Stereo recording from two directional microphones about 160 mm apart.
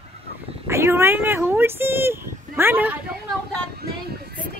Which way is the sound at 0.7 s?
15° right (ahead or behind).